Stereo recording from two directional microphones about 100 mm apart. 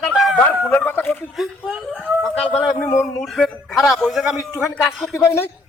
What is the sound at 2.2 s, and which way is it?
Speech, 10° left (ahead or behind).